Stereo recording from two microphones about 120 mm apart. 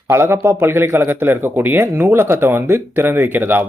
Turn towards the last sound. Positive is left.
turn(degrees=-15)  # may be behind; listen again after turning